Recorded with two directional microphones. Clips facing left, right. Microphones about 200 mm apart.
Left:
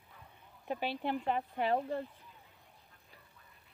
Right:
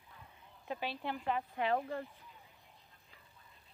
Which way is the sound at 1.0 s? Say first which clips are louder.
Left 3 dB; 30° left (ahead or behind).